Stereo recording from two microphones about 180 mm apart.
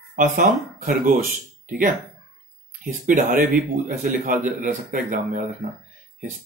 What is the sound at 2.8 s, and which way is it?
Speech, 45° right (ahead or behind).